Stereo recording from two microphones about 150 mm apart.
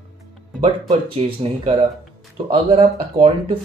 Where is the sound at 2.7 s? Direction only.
35° right (ahead or behind).